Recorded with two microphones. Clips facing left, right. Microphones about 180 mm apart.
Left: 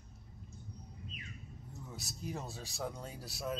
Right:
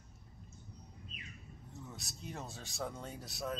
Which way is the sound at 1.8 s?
Centre (ahead or behind).